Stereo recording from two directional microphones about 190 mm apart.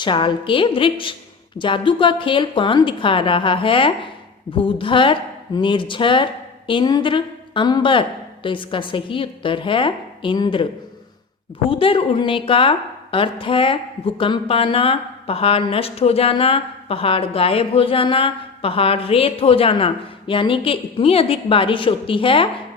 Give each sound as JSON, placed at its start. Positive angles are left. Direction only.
{"t": 0.0, "sound": "a woman's voice", "side_deg": 25}
{"t": 11.7, "sound": "a woman's voice", "side_deg": 30}